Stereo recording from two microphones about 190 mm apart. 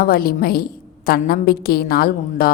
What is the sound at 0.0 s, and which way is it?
Speech, 50° left (ahead or behind).